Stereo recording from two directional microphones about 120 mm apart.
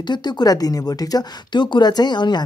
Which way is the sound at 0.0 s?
40° left (ahead or behind).